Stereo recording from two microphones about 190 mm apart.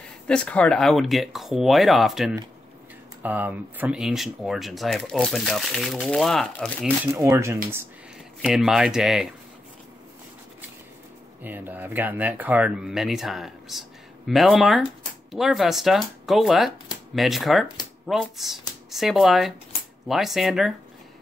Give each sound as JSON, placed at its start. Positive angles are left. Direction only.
{"t": 0.3, "sound": "speech", "side_deg": 5}
{"t": 7.2, "sound": "speech", "side_deg": -15}
{"t": 8.4, "sound": "speech", "side_deg": 0}
{"t": 11.4, "sound": "speech", "side_deg": -10}